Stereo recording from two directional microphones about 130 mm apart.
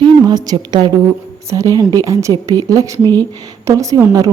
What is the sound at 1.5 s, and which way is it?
Speech, 25° right (ahead or behind).